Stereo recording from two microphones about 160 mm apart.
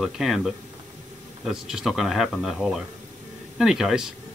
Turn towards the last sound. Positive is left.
turn(degrees=-5)  # may be behind; listen again after turning